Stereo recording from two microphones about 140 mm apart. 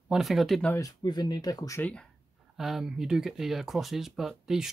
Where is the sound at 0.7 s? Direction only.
25° left (ahead or behind).